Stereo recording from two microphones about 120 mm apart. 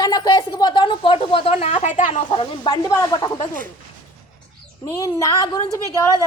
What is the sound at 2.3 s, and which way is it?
A woman's voice, 45° left (ahead or behind).